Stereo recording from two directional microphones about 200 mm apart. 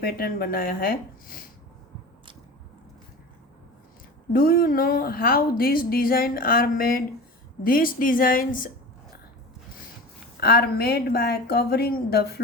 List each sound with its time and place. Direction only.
0.0 s a woman's voice: 50° left (ahead or behind)
4.3 s a woman's voice: 45° left (ahead or behind)
10.4 s a woman's voice: 50° left (ahead or behind)